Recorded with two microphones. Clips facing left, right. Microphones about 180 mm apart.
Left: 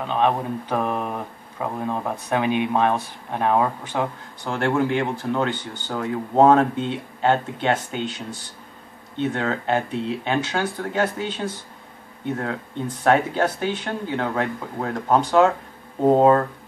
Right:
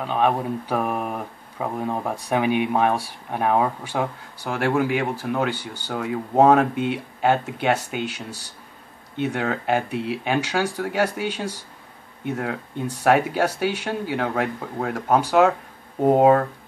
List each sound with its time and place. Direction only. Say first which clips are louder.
0.0 s speech: even; 10° right (ahead or behind)